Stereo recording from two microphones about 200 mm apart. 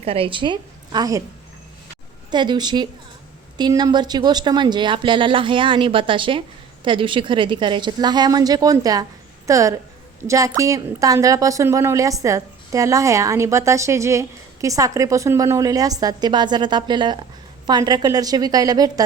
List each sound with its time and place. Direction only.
0.0 s speech: 30° right (ahead or behind)
2.3 s a woman's voice: 20° right (ahead or behind)